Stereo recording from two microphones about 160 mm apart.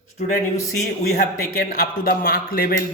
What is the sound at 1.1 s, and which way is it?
Speech, 70° left (ahead or behind).